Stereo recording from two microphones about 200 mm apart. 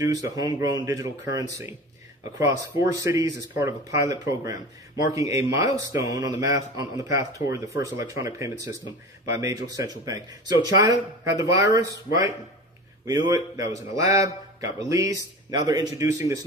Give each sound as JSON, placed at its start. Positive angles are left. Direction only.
{"t": 0.0, "sound": "a man's voice", "side_deg": -15}